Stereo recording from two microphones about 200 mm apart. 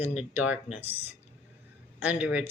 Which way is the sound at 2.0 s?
5° right (ahead or behind).